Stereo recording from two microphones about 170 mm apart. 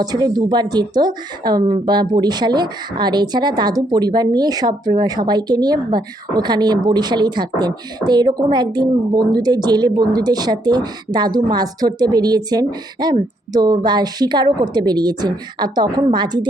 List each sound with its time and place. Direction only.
0.0 s speech: 20° right (ahead or behind)